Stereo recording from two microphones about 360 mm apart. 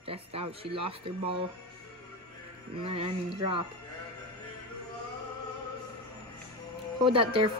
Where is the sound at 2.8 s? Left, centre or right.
Centre.